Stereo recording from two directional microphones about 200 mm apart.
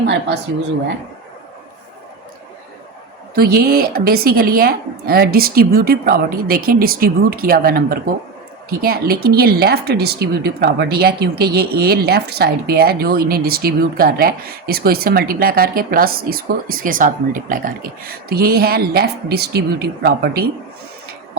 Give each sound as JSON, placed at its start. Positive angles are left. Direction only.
{"t": 3.3, "sound": "a woman's voice", "side_deg": -50}